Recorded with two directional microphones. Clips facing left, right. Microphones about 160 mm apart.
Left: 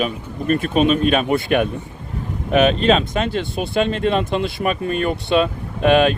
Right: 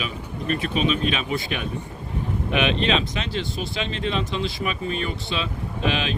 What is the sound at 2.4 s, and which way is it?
Speech, 40° left (ahead or behind).